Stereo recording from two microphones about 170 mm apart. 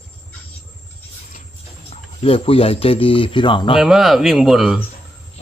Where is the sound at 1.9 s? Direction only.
35° left (ahead or behind).